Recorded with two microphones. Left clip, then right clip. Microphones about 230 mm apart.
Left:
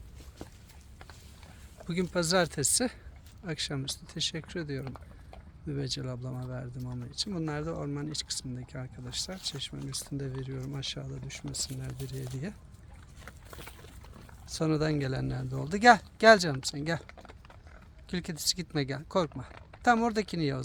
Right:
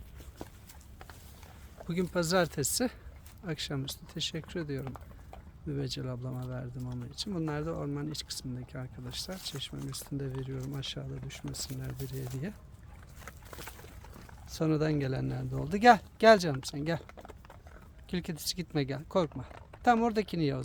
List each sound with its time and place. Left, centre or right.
1.8 s speech: centre
14.4 s speech: centre
17.1 s typing: right
18.1 s speech: centre